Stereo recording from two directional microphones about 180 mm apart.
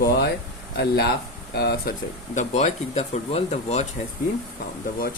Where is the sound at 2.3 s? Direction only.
40° left (ahead or behind).